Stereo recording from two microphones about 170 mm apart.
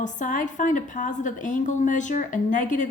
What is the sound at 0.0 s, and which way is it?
A woman's voice, 50° left (ahead or behind).